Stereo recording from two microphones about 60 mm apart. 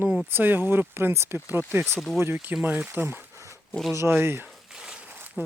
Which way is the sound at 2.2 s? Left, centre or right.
Right.